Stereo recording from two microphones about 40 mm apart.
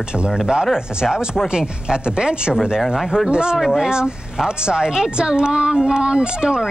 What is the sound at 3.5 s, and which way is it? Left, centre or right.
Speech, centre.